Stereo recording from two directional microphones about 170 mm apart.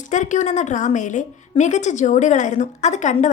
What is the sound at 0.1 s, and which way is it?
A woman's voice, 45° left (ahead or behind).